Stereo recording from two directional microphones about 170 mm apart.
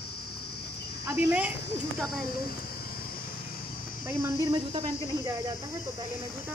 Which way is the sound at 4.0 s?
15° right (ahead or behind).